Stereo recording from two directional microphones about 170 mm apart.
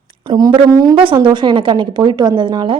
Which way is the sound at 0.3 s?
25° right (ahead or behind).